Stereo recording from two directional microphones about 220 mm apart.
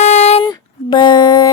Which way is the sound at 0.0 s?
30° left (ahead or behind).